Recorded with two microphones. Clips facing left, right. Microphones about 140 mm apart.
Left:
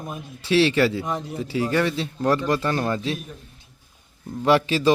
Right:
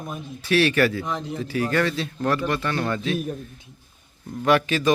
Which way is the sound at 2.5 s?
35° left (ahead or behind).